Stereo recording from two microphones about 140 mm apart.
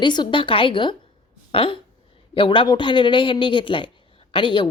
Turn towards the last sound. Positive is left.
turn(degrees=35)  # may be behind; listen again after turning